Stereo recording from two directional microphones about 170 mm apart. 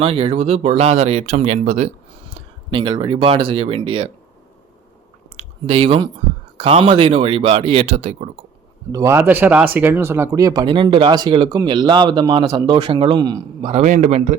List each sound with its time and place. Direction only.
0.0 s speech: 35° right (ahead or behind)
5.4 s speech: 35° right (ahead or behind)
8.9 s speech: 20° right (ahead or behind)
13.7 s speech: 40° right (ahead or behind)